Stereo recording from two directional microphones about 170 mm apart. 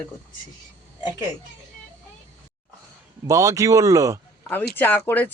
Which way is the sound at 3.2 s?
20° right (ahead or behind).